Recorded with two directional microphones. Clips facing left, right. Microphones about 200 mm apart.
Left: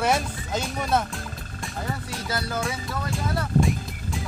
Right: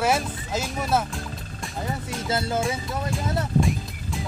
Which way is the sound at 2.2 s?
25° right (ahead or behind).